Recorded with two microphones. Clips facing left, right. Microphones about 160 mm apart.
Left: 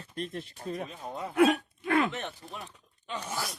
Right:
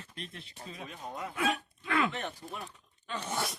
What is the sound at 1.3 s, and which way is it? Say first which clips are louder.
Speech: left 10 dB; 65° left (ahead or behind).